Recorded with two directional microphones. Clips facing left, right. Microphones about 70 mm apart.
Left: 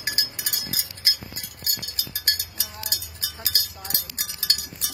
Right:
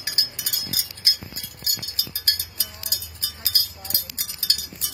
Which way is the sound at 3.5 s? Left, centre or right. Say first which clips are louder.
Right 1 dB; left.